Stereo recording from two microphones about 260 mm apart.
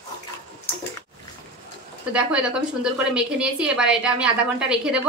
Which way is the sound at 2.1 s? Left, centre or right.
Centre.